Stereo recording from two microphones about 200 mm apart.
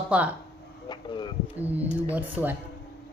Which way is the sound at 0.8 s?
20° left (ahead or behind).